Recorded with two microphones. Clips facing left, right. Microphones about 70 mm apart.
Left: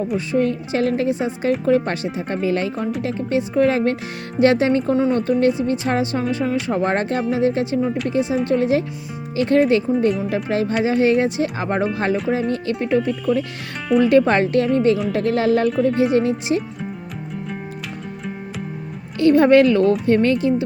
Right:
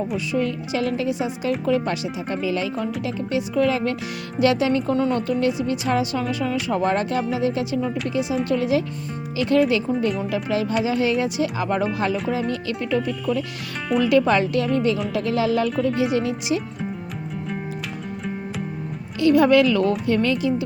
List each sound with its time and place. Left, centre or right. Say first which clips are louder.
0.3 s speech: left 4 dB; left
15.1 s music: left 3 dB; left
16.1 s speech: left 4 dB; left
19.2 s speech: left 3 dB; left